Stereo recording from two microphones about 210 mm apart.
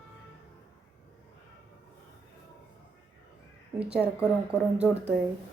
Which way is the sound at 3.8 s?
5° right (ahead or behind).